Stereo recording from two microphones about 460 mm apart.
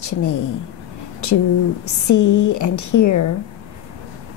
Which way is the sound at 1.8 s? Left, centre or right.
Left.